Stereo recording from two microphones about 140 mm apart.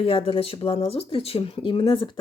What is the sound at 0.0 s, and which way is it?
Speech, 40° left (ahead or behind).